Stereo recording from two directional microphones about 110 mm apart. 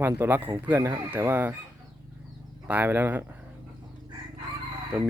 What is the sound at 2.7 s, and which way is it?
Speech, 15° right (ahead or behind).